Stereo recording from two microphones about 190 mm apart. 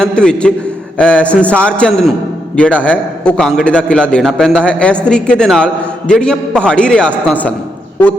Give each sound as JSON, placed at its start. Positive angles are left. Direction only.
{"t": 0.0, "sound": "a man's voice", "side_deg": 5}